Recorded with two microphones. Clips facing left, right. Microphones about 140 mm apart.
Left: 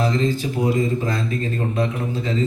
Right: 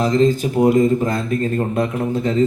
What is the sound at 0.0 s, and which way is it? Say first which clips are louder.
A man's voice: right 5 dB; 45° right (ahead or behind).